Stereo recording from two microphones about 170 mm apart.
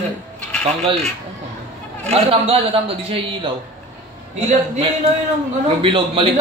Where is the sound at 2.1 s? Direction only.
35° right (ahead or behind).